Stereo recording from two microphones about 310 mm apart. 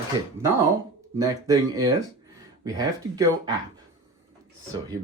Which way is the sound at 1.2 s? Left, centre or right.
Centre.